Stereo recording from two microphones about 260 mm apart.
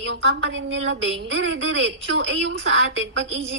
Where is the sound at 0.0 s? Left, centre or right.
Right.